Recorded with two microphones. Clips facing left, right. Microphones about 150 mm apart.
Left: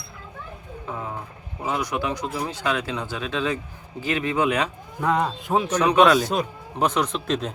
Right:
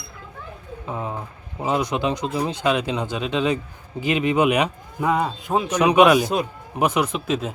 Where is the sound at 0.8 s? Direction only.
20° right (ahead or behind); by 5.6 s centre (ahead or behind).